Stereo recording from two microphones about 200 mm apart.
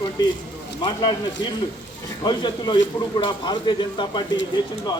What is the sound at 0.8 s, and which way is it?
Speech, 25° left (ahead or behind).